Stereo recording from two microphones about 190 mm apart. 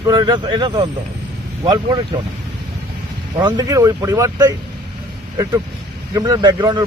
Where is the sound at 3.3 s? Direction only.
25° right (ahead or behind).